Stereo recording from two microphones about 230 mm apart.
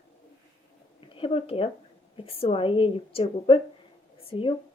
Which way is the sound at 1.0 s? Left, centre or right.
Left.